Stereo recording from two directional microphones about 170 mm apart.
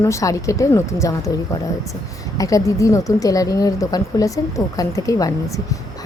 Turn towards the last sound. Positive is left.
turn(degrees=20)  # may be behind; listen again after turning